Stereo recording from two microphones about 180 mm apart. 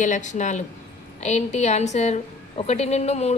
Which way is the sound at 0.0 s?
45° left (ahead or behind).